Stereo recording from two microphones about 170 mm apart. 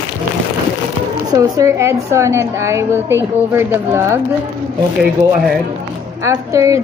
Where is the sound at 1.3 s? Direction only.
20° right (ahead or behind).